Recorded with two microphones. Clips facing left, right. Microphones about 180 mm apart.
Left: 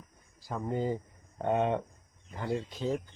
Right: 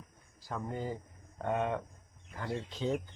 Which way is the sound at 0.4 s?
15° left (ahead or behind).